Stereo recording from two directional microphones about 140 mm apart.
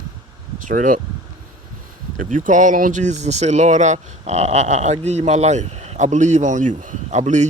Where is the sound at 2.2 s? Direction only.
65° right (ahead or behind).